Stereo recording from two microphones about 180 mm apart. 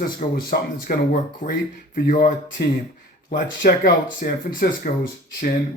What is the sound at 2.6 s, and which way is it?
A man's voice, 60° left (ahead or behind).